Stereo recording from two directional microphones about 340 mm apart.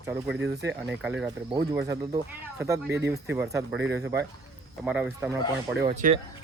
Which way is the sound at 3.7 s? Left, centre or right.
Right.